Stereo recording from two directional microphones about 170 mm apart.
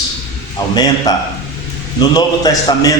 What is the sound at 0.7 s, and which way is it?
A man's voice, 25° left (ahead or behind).